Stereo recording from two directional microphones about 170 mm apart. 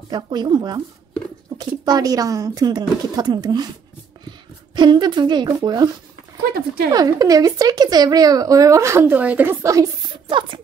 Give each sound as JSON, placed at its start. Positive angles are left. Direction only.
{"t": 0.1, "sound": "a woman's voice", "side_deg": -25}
{"t": 4.7, "sound": "a woman's voice", "side_deg": -25}
{"t": 6.9, "sound": "a woman's voice", "side_deg": -20}